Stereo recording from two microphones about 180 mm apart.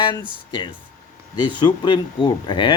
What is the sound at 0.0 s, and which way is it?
Speech, 25° left (ahead or behind).